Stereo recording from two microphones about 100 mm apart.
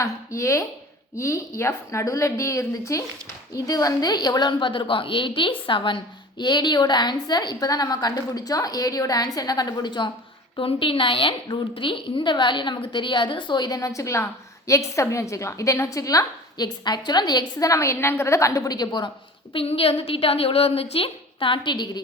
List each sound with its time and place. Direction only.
0.0 s a woman's voice: 30° left (ahead or behind); by 10.1 s 50° left (ahead or behind)
10.6 s a woman's voice: 65° left (ahead or behind)
19.5 s a woman's voice: 70° left (ahead or behind); by 22.0 s 50° left (ahead or behind)